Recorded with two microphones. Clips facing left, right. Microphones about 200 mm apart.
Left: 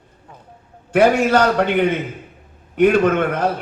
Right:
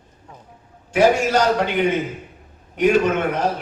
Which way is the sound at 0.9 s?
60° left (ahead or behind).